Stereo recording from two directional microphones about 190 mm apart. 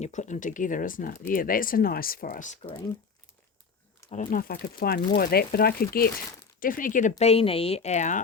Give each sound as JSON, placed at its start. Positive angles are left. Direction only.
{"t": 0.0, "sound": "speech", "side_deg": 40}
{"t": 4.3, "sound": "speech", "side_deg": 50}